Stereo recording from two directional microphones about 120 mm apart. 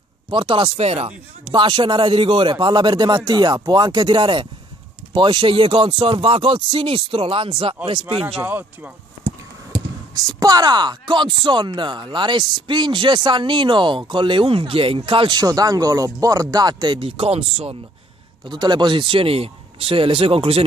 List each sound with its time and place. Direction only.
0.3 s speech: 50° right (ahead or behind)
1.5 s speech: 45° right (ahead or behind)
8.4 s speech: 15° right (ahead or behind)
10.4 s speech: 35° right (ahead or behind); by 17.7 s 55° right (ahead or behind)
18.4 s speech: 40° right (ahead or behind); by 20.6 s 55° right (ahead or behind)